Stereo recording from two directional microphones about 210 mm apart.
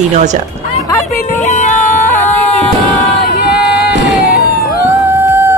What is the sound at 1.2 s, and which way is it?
Music, 35° left (ahead or behind).